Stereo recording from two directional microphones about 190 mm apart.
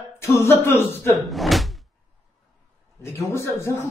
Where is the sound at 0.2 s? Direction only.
15° left (ahead or behind).